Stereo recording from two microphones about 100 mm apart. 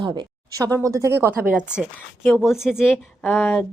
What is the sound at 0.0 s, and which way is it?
Speech, 50° right (ahead or behind).